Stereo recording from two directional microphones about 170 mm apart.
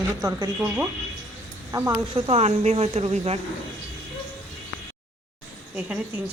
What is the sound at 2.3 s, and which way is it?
Speech, 40° right (ahead or behind).